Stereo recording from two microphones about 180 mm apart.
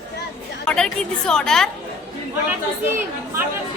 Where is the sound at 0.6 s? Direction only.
5° left (ahead or behind).